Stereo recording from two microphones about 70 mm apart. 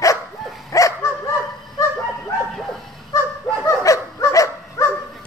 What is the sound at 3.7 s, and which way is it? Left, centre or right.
Dog, left.